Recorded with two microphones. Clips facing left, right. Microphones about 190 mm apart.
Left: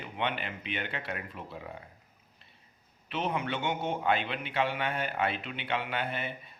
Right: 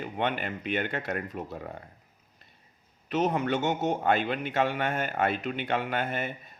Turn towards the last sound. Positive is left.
turn(degrees=-45)  # may be behind; listen again after turning